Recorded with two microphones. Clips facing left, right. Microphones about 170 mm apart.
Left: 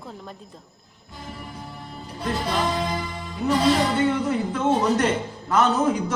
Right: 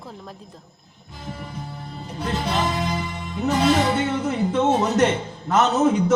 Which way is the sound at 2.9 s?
20° right (ahead or behind).